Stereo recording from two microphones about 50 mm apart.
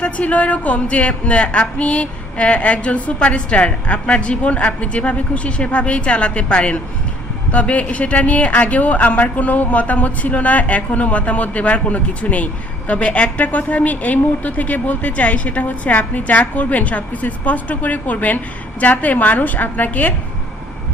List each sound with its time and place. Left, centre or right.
0.0 s a woman's voice: left